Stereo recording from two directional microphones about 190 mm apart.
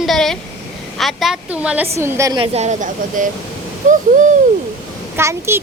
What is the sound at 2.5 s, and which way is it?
A woman's voice, 40° right (ahead or behind).